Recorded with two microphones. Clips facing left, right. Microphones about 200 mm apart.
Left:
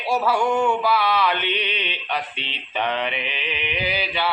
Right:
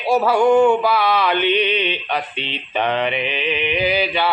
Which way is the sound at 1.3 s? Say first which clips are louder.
Right 9 dB; 55° right (ahead or behind).